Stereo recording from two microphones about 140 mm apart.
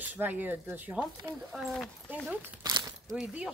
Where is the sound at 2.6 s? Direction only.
30° right (ahead or behind).